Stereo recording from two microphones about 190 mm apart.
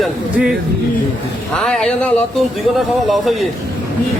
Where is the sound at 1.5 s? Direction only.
5° left (ahead or behind).